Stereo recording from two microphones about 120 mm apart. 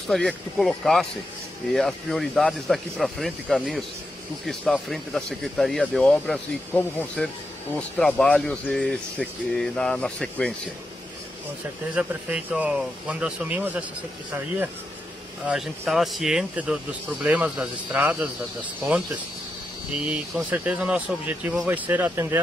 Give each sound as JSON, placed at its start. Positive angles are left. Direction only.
{"t": 0.0, "sound": "speech", "side_deg": 5}
{"t": 11.9, "sound": "speech", "side_deg": -10}
{"t": 15.4, "sound": "speech", "side_deg": -5}
{"t": 20.4, "sound": "speech", "side_deg": -15}